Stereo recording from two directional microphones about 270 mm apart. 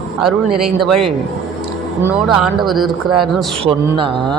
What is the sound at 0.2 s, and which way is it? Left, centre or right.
Speech, centre.